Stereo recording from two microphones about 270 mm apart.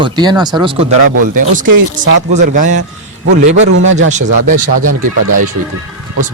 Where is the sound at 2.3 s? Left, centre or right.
Right.